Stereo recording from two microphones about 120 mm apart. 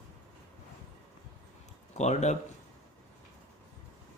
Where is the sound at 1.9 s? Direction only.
70° left (ahead or behind).